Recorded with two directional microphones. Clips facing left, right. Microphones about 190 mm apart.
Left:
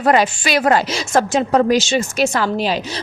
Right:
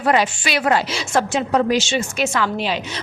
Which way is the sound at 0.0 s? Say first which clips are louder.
Left 3 dB; 45° left (ahead or behind).